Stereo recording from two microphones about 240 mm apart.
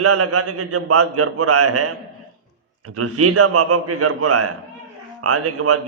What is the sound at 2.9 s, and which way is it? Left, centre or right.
A man's voice, right.